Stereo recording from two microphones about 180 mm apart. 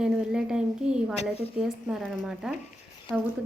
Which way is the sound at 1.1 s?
35° left (ahead or behind).